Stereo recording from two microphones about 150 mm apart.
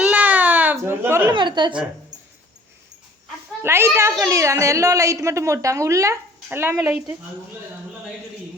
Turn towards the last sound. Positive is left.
turn(degrees=-10)  # may be behind; listen again after turning